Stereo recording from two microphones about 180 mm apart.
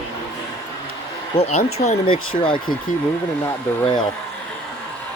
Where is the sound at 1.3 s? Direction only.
35° left (ahead or behind).